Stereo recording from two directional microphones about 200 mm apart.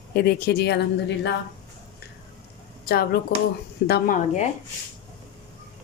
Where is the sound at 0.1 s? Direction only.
50° left (ahead or behind).